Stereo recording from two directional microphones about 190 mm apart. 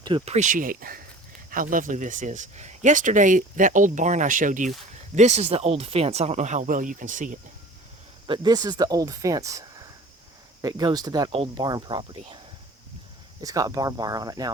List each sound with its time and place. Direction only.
0.0 s speech: 25° right (ahead or behind)
0.3 s speech: 45° right (ahead or behind)
8.3 s speech: 20° right (ahead or behind)
13.4 s speech: 20° right (ahead or behind)